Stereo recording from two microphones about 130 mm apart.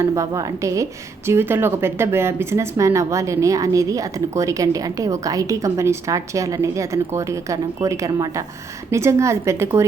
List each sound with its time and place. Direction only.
0.0 s a woman's voice: 25° right (ahead or behind)